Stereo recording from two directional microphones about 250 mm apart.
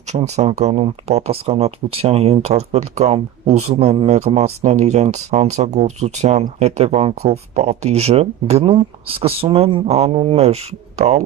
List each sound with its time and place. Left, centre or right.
0.1 s speech: right